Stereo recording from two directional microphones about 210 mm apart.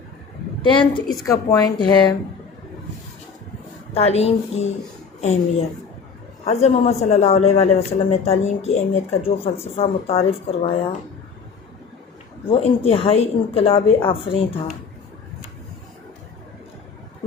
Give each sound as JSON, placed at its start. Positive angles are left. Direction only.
{"t": 0.6, "sound": "a man's voice", "side_deg": 20}
{"t": 3.9, "sound": "a man's voice", "side_deg": 30}
{"t": 6.4, "sound": "a man's voice", "side_deg": 30}
{"t": 12.5, "sound": "a man's voice", "side_deg": 25}